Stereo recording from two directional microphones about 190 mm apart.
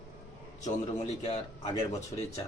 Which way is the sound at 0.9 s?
35° left (ahead or behind).